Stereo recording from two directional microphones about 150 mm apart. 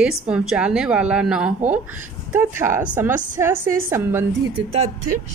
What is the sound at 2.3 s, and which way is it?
A woman's voice, 15° right (ahead or behind).